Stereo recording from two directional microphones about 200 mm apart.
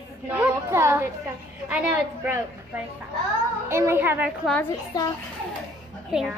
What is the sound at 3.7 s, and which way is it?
Speech, 10° right (ahead or behind).